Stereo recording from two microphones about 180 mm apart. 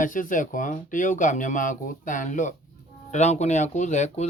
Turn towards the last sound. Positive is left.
turn(degrees=40)  # may be behind; listen again after turning